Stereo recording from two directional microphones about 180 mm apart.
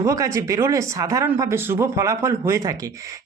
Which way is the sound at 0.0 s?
15° right (ahead or behind).